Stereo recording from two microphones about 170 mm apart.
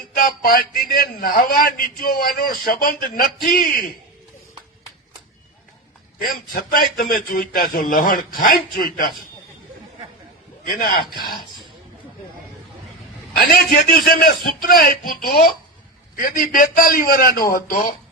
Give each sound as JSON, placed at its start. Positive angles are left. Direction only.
{"t": 0.2, "sound": "a man's voice", "side_deg": 60}
{"t": 6.1, "sound": "a man's voice", "side_deg": 60}
{"t": 10.7, "sound": "a man's voice", "side_deg": 60}
{"t": 13.3, "sound": "a man's voice", "side_deg": 60}